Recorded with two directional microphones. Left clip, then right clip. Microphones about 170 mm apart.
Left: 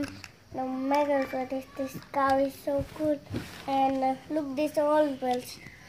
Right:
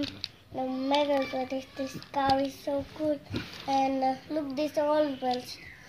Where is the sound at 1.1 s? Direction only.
5° left (ahead or behind).